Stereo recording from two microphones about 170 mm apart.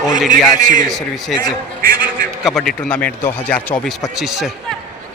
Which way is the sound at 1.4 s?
60° right (ahead or behind).